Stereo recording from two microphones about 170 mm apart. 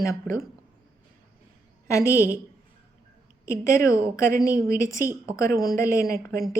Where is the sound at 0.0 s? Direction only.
15° left (ahead or behind).